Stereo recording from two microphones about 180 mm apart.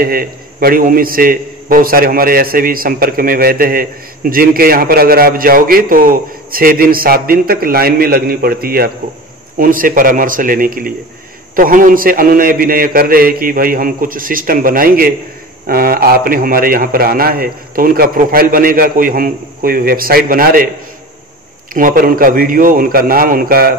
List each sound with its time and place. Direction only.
0.0 s a man's voice: 55° right (ahead or behind)
21.7 s a man's voice: 50° right (ahead or behind)